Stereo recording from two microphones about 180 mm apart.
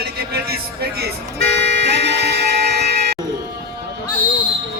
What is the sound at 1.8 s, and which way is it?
Music, 70° right (ahead or behind).